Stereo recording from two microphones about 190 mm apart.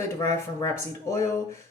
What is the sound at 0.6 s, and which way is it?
Speech, 15° left (ahead or behind).